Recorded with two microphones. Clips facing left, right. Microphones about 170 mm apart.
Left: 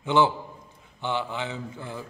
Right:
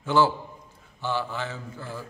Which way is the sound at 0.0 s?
20° left (ahead or behind).